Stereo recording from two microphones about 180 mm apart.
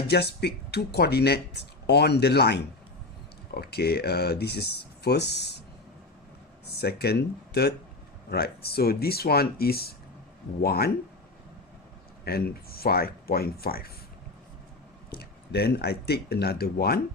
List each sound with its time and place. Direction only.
0.1 s speech: 65° left (ahead or behind)
6.7 s speech: 65° left (ahead or behind)
12.2 s speech: 60° left (ahead or behind)
15.1 s speech: 65° left (ahead or behind)